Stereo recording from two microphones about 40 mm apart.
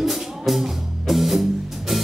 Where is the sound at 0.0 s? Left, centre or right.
Centre.